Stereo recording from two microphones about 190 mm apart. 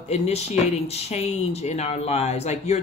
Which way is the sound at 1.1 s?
35° left (ahead or behind).